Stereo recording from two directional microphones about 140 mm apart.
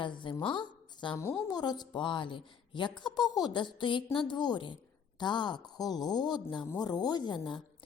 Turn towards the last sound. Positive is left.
turn(degrees=35)  # may be behind; listen again after turning